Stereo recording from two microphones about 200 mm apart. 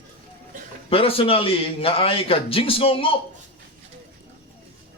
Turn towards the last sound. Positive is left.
turn(degrees=25)  # may be behind; listen again after turning